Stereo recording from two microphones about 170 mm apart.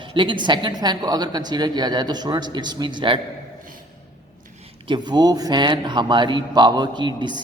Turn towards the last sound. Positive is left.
turn(degrees=-25)  # may be behind; listen again after turning